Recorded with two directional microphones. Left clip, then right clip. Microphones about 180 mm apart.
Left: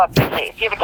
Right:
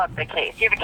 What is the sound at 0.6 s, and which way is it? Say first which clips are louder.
Speech: right 4 dB; 35° left (ahead or behind).